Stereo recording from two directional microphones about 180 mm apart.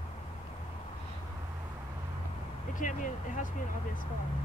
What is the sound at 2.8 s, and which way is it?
Speech, 45° left (ahead or behind).